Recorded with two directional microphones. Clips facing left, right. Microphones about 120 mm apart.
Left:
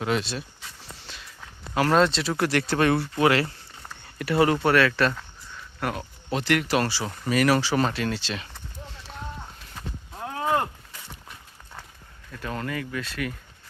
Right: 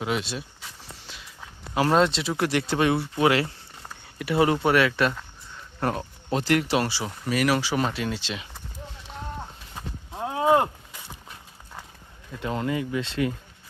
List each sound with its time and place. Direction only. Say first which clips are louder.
0.0 s speech: left 2 dB; 10° right (ahead or behind)
3.8 s a sound: left 1 dB; 10° right (ahead or behind)
4.4 s speech: even; 15° right (ahead or behind)
5.8 s speech: right 3 dB; 30° right (ahead or behind)
6.7 s speech: even; 15° right (ahead or behind)
9.7 s a sound: right 3 dB; 20° right (ahead or behind)
12.3 s speech: right 4 dB; 20° right (ahead or behind)